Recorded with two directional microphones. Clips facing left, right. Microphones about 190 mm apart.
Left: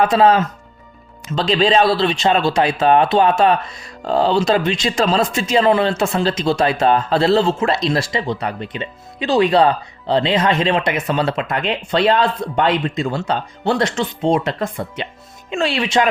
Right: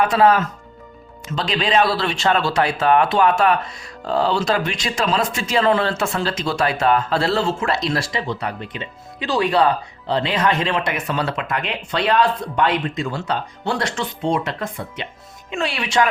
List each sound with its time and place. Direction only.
0.0 s speech: 25° left (ahead or behind)